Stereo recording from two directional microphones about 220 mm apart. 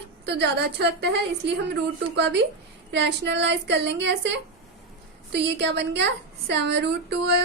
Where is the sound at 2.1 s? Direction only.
50° right (ahead or behind).